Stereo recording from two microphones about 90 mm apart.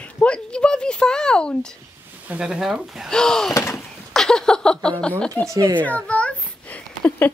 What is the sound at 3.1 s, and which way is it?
A child's voice, 5° left (ahead or behind).